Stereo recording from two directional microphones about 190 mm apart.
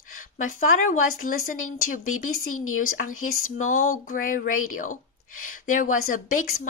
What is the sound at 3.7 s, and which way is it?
Speech, 45° left (ahead or behind).